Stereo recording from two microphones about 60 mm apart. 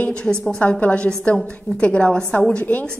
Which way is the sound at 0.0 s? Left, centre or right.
Centre.